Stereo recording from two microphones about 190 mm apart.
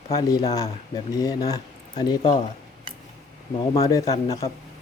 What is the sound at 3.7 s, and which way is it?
Speech, 20° left (ahead or behind).